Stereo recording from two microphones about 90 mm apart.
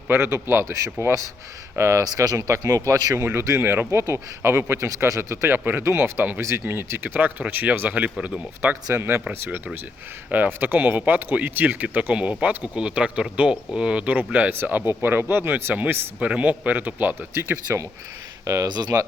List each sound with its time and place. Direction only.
0.1 s speech: 25° right (ahead or behind)
2.0 s speech: 40° right (ahead or behind)
3.2 s speech: 25° right (ahead or behind)
17.3 s speech: 30° right (ahead or behind); by 19.0 s 45° right (ahead or behind)